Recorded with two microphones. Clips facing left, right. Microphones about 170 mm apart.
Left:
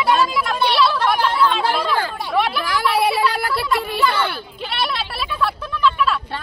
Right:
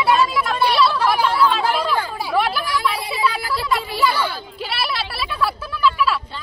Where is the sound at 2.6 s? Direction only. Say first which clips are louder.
Left 5 dB; 70° left (ahead or behind).